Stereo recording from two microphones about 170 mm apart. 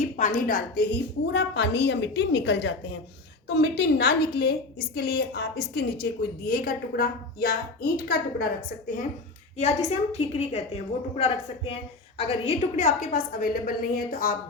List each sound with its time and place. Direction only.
0.0 s a woman's voice: 50° left (ahead or behind)
1.3 s a woman's voice: 90° left
3.5 s a woman's voice: 80° left; by 8.4 s 65° left (ahead or behind)
9.6 s a woman's voice: 40° left (ahead or behind)